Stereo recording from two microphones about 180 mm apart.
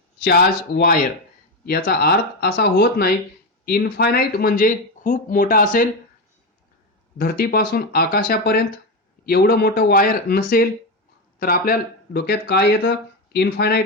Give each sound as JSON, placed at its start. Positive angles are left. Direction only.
{"t": 0.2, "sound": "speech", "side_deg": 60}
{"t": 7.2, "sound": "speech", "side_deg": 55}